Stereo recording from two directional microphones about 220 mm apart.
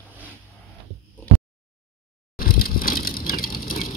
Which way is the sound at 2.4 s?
40° left (ahead or behind).